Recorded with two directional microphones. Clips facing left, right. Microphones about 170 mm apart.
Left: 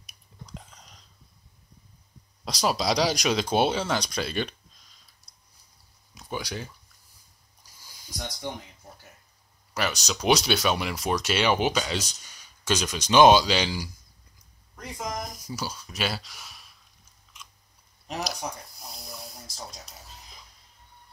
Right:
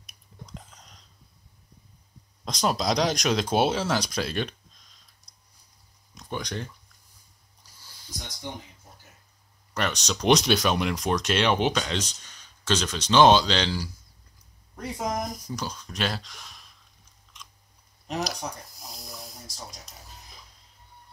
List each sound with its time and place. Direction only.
0.6 s a sound: centre (ahead or behind)
2.4 s speech: 5° left (ahead or behind)
6.1 s speech: 5° left (ahead or behind)
9.8 s speech: 5° left (ahead or behind)
14.8 s speech: 35° right (ahead or behind)
15.4 s speech: 5° left (ahead or behind)
18.0 s a sound: centre (ahead or behind)